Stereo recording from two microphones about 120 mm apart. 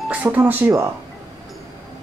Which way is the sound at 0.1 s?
15° right (ahead or behind).